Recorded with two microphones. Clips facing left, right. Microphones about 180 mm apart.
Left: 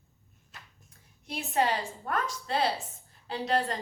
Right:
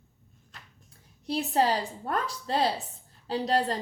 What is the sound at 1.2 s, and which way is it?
A woman's voice, 35° right (ahead or behind).